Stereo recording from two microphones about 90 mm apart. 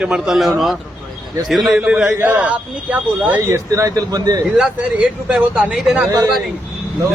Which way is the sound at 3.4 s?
35° right (ahead or behind).